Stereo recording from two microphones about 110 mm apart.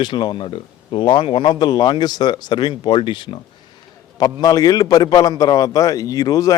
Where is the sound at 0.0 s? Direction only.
45° left (ahead or behind).